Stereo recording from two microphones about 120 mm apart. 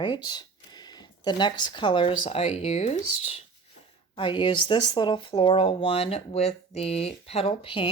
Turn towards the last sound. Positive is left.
turn(degrees=45)  # may be behind; listen again after turning